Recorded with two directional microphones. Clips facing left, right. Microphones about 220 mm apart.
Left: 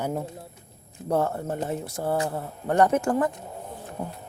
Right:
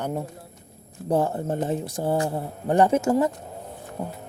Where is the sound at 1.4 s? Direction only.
30° right (ahead or behind).